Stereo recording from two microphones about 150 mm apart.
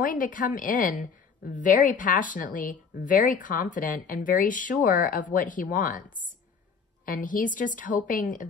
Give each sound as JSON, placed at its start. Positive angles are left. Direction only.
{"t": 0.0, "sound": "a woman's voice", "side_deg": 65}